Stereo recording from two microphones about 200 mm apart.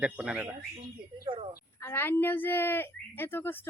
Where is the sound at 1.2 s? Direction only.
25° right (ahead or behind).